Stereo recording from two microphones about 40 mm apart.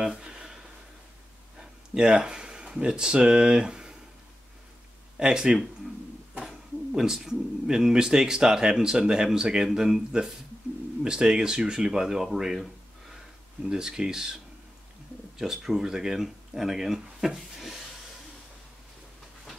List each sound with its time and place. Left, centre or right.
0.0 s a sound: centre
1.6 s speech: centre
5.2 s speech: right
6.9 s speech: centre
11.1 s speech: centre
13.7 s speech: centre